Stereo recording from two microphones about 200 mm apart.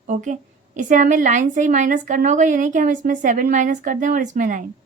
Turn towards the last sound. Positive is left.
turn(degrees=-40)  # may be behind; listen again after turning